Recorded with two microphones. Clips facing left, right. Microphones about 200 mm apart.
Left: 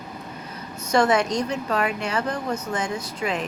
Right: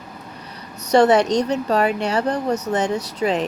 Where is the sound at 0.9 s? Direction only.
35° right (ahead or behind).